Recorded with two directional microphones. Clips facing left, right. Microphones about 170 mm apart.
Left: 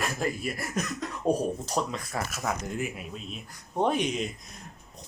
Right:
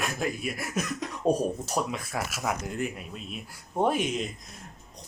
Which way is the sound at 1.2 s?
20° right (ahead or behind).